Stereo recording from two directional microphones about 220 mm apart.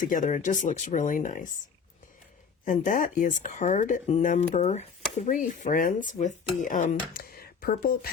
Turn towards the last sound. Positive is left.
turn(degrees=40)  # may be behind; listen again after turning